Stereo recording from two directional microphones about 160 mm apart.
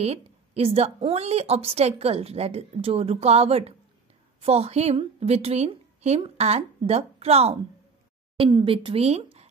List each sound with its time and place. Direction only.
0.0 s a woman's voice: 40° right (ahead or behind)